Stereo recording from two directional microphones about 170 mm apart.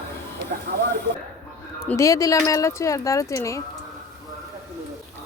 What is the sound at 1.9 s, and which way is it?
Speech, 20° left (ahead or behind).